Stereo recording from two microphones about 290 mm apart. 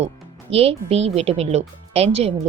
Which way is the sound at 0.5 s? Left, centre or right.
Centre.